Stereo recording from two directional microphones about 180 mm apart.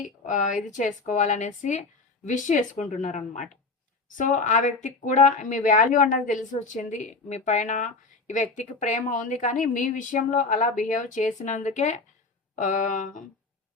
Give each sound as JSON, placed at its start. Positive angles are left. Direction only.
{"t": 0.3, "sound": "speech", "side_deg": 45}